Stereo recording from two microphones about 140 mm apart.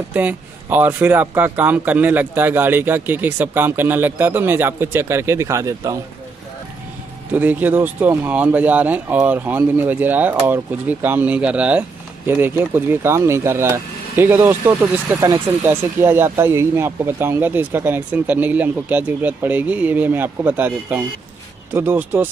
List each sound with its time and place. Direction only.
0.1 s speech: 10° right (ahead or behind)
7.3 s speech: 10° right (ahead or behind)
15.1 s speech: 25° right (ahead or behind)